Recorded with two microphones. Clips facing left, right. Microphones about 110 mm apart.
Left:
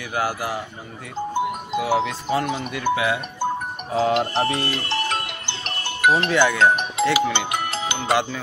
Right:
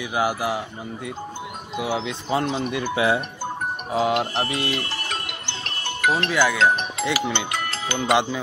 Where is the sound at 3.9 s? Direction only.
10° right (ahead or behind).